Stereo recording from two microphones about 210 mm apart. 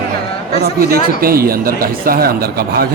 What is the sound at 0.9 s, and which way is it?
Speech, 45° right (ahead or behind).